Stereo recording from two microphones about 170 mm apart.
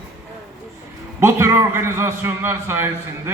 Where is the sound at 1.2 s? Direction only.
15° right (ahead or behind).